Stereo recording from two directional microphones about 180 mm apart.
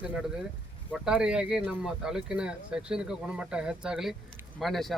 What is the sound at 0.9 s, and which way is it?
Speech, 5° right (ahead or behind).